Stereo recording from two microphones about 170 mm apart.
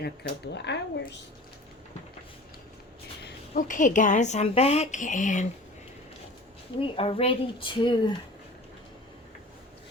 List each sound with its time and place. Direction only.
0.0 s speech: 80° left
3.5 s a woman's voice: 50° left (ahead or behind)
6.7 s speech: 35° left (ahead or behind)